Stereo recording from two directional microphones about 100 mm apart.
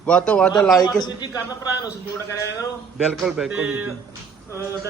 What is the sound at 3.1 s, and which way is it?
Speech, centre (ahead or behind).